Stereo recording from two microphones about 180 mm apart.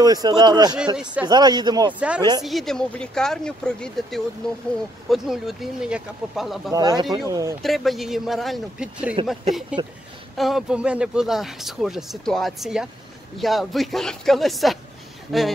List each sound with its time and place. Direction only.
0.0 s a man's voice: 20° right (ahead or behind)
2.0 s speech: 5° right (ahead or behind)
6.7 s a man's voice: 20° right (ahead or behind)
7.6 s speech: centre (ahead or behind)